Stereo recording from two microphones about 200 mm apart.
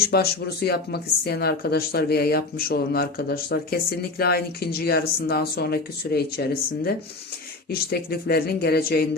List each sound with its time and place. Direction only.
0.1 s speech: 50° left (ahead or behind)